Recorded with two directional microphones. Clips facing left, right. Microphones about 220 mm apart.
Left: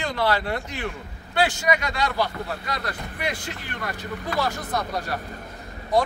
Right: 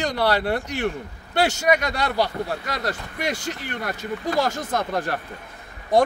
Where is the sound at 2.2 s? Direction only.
45° right (ahead or behind).